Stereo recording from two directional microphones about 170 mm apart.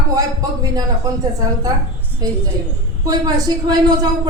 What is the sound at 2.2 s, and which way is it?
A woman's voice, 20° right (ahead or behind).